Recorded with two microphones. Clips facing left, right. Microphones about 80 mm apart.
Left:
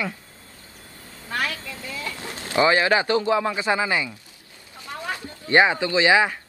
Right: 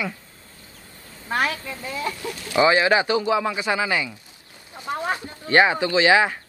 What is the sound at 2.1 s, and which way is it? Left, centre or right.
Chicken, left.